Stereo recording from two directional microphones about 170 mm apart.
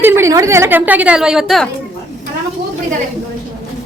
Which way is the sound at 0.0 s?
15° right (ahead or behind).